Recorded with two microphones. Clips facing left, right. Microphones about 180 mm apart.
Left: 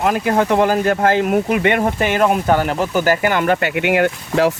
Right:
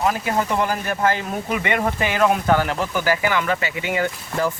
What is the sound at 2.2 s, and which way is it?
Speech, 30° left (ahead or behind).